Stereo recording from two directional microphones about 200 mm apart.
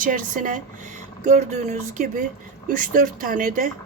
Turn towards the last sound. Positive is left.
turn(degrees=-45)  # may be behind; listen again after turning